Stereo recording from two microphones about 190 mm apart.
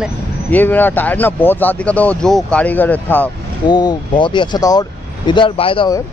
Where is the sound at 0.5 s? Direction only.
10° left (ahead or behind).